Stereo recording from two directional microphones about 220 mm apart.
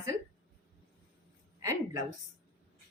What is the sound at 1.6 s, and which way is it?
Speech, 15° right (ahead or behind).